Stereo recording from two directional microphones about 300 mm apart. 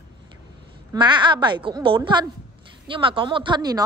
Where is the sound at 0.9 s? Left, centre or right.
Centre.